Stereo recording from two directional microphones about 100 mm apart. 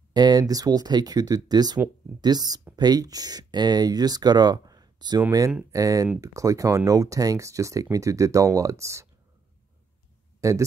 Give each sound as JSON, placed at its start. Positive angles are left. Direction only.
{"t": 0.1, "sound": "speech", "side_deg": -45}
{"t": 10.4, "sound": "speech", "side_deg": -35}